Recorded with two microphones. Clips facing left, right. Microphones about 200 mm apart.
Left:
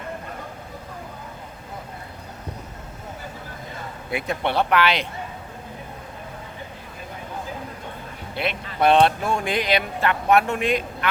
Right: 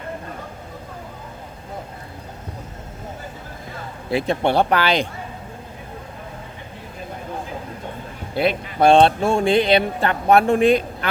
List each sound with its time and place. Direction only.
4.1 s speech: 30° right (ahead or behind)
8.4 s speech: 35° right (ahead or behind)